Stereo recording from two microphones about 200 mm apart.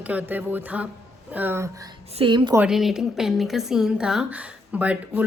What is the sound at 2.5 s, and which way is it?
A woman's voice, 5° right (ahead or behind).